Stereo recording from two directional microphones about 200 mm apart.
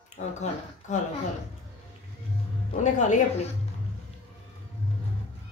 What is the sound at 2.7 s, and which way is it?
Speech, 35° left (ahead or behind).